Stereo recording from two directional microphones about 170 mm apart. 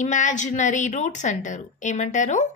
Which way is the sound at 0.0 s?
45° left (ahead or behind).